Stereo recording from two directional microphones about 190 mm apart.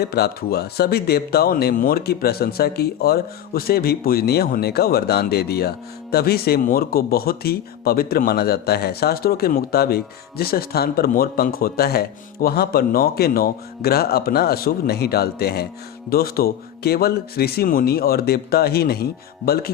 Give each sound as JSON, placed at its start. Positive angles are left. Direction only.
{"t": 0.0, "sound": "speech", "side_deg": 55}